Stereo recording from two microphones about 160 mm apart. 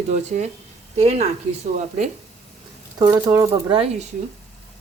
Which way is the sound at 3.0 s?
20° right (ahead or behind).